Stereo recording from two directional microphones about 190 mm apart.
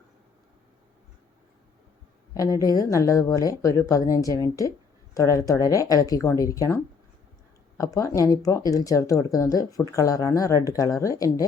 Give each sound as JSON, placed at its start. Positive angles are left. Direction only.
{"t": 2.3, "sound": "speech", "side_deg": 20}
{"t": 7.8, "sound": "speech", "side_deg": 15}